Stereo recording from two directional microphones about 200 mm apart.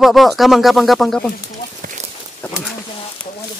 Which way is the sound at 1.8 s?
40° right (ahead or behind).